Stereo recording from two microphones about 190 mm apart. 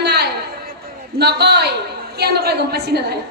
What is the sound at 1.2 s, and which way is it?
A woman's voice, 60° right (ahead or behind).